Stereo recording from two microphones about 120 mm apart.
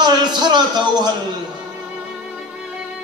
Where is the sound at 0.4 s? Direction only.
35° right (ahead or behind).